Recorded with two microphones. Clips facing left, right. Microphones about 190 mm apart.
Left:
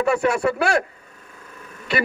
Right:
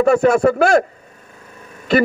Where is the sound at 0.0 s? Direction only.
45° right (ahead or behind).